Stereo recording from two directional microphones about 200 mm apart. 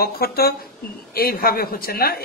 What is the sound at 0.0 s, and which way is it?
A woman's voice, 50° left (ahead or behind).